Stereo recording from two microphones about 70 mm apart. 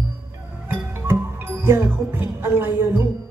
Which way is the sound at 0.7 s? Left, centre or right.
Right.